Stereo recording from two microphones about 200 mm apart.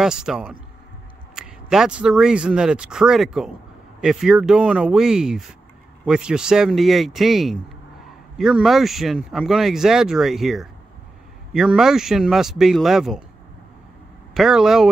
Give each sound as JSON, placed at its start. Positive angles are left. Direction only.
{"t": 0.0, "sound": "speech", "side_deg": -5}
{"t": 14.3, "sound": "speech", "side_deg": 0}